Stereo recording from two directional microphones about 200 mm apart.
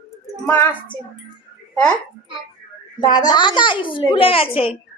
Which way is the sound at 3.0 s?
20° left (ahead or behind).